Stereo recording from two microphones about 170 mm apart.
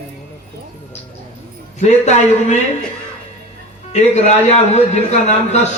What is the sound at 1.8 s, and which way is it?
Speech, 40° left (ahead or behind).